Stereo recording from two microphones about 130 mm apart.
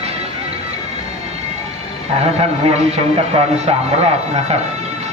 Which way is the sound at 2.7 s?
55° right (ahead or behind).